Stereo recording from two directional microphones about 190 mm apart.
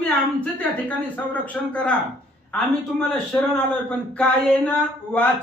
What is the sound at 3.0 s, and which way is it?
Speech, 5° left (ahead or behind).